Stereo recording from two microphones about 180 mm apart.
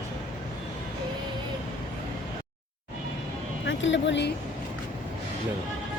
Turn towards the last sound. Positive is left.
turn(degrees=80)